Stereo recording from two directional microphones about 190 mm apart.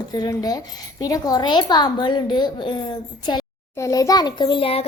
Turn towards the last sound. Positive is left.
turn(degrees=30)  # may be behind; listen again after turning